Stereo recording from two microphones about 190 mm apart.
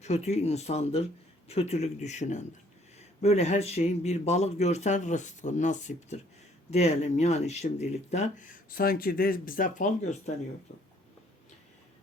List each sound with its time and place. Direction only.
0.0 s speech: 35° left (ahead or behind)